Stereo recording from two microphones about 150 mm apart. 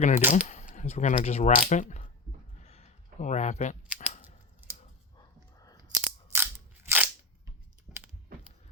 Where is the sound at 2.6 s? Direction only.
45° left (ahead or behind).